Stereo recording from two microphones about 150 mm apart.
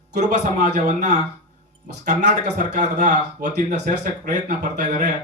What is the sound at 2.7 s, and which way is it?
Speech, 50° right (ahead or behind).